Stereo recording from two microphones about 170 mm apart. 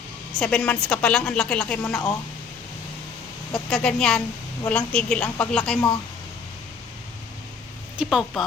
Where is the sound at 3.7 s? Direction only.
5° left (ahead or behind).